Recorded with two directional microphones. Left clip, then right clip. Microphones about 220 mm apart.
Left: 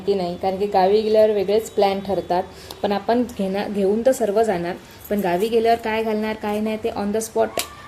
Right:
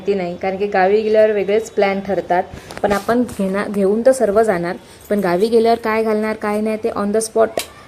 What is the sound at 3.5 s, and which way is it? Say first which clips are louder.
Speech: right 4 dB; 10° right (ahead or behind).